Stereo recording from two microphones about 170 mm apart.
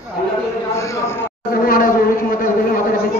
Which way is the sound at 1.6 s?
60° left (ahead or behind).